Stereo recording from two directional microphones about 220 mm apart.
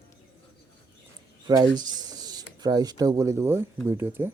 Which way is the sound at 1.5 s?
20° right (ahead or behind).